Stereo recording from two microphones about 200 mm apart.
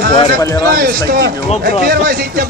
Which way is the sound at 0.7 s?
50° right (ahead or behind).